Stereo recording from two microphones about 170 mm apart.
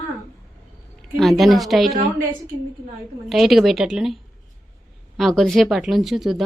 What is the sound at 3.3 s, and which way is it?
Speech, centre (ahead or behind).